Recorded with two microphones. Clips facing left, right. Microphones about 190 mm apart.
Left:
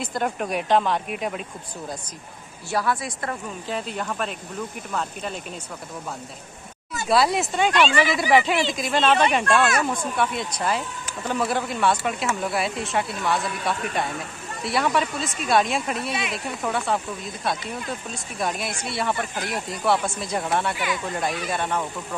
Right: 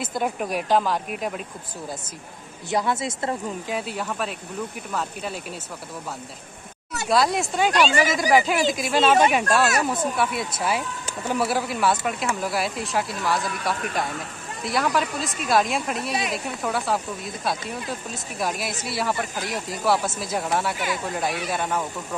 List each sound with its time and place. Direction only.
0.0 s speech: 5° right (ahead or behind)
2.7 s speech: 20° right (ahead or behind)
3.7 s speech: 5° right (ahead or behind)
7.1 s speech: centre (ahead or behind)
16.1 s speech: 40° right (ahead or behind)
16.6 s speech: centre (ahead or behind)
18.1 s speech: centre (ahead or behind)